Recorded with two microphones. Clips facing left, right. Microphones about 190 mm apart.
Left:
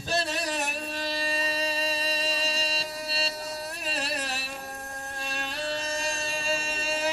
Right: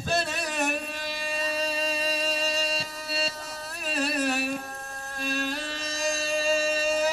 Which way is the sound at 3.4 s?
35° left (ahead or behind).